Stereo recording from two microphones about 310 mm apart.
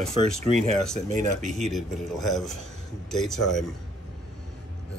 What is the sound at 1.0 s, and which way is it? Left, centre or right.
Speech, right.